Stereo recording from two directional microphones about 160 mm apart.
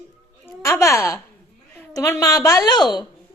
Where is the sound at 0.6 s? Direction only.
20° left (ahead or behind).